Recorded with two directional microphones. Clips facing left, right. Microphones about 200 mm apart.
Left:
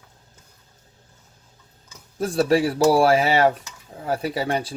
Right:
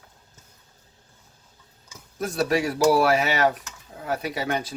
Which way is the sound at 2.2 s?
30° left (ahead or behind).